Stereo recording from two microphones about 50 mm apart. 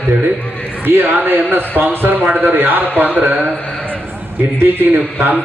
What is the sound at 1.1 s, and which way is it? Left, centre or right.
Speech, right.